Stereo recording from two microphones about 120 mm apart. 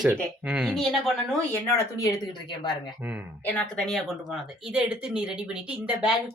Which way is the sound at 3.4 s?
10° left (ahead or behind).